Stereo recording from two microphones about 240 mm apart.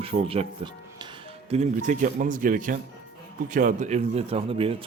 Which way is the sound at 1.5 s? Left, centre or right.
Right.